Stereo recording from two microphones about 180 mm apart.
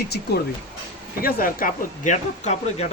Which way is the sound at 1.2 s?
50° left (ahead or behind).